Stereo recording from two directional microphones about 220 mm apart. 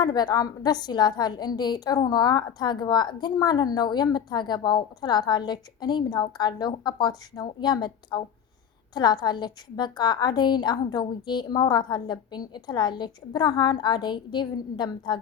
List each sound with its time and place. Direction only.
0.0 s a woman's voice: 20° left (ahead or behind)